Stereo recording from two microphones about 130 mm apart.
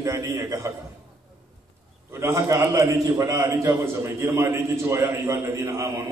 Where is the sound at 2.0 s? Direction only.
20° right (ahead or behind).